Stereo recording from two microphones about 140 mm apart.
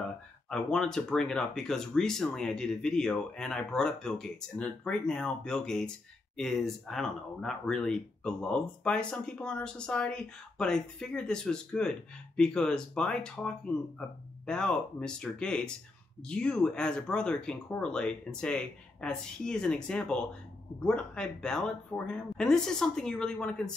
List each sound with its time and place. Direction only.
0.5 s speech: 5° left (ahead or behind)